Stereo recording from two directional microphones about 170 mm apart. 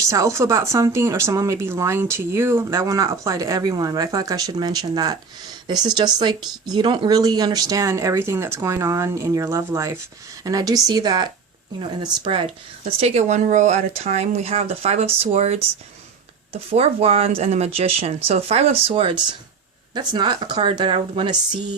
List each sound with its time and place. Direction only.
0.0 s speech: 20° right (ahead or behind)
13.0 s speech: 40° right (ahead or behind)